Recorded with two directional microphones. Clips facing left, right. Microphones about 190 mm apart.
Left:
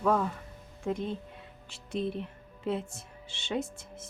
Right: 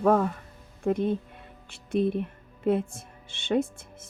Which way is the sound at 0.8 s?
55° right (ahead or behind).